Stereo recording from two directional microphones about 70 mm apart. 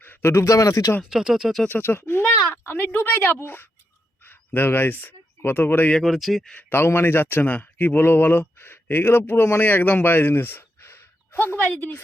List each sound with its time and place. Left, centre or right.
0.0 s speech: left
1.1 s speech: centre
1.6 s a woman's voice: left
6.0 s speech: centre
6.6 s speech: left